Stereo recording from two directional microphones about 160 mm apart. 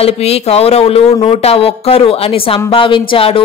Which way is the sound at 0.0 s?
40° left (ahead or behind).